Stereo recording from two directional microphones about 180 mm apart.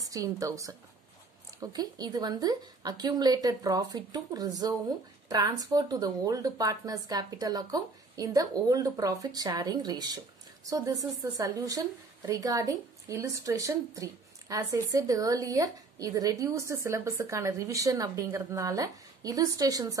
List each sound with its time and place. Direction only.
0.0 s speech: 20° right (ahead or behind)